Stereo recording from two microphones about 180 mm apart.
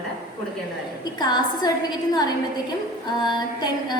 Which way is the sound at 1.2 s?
25° left (ahead or behind).